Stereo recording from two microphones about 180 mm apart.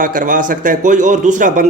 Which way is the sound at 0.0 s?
50° right (ahead or behind).